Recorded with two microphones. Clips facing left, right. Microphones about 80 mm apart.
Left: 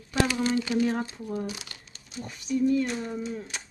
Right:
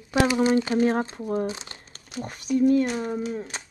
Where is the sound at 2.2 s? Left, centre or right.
Right.